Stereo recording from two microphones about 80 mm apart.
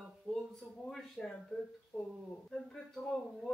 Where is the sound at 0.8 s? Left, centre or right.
Centre.